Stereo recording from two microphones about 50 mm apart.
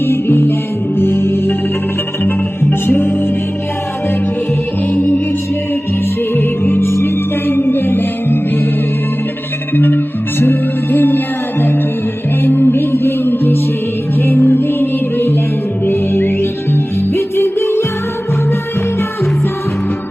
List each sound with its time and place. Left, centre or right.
0.0 s music: left
4.9 s music: left
6.3 s music: left
9.7 s music: left
12.4 s music: left